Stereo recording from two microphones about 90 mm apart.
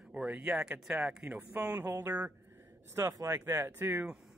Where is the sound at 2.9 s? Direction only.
35° right (ahead or behind).